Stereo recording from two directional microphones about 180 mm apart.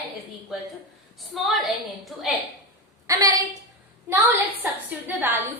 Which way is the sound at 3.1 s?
20° right (ahead or behind).